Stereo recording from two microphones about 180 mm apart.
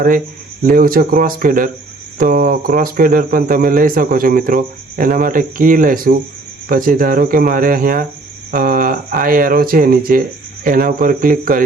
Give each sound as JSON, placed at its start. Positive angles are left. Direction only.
{"t": 0.6, "sound": "speech", "side_deg": -50}